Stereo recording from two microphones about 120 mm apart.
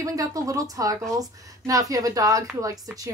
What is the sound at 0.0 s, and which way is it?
Speech, 30° right (ahead or behind).